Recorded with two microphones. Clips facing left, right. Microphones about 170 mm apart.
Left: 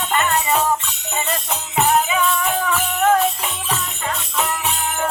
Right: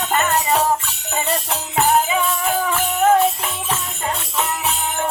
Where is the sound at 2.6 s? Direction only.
30° right (ahead or behind).